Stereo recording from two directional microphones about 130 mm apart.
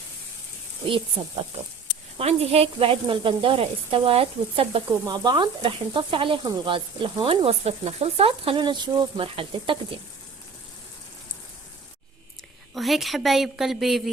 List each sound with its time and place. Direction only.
1.2 s speech: 40° right (ahead or behind)
2.1 s speech: 50° right (ahead or behind)
12.7 s a woman's voice: centre (ahead or behind)